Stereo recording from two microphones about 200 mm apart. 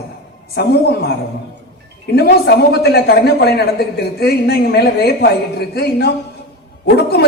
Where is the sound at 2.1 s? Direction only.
55° left (ahead or behind).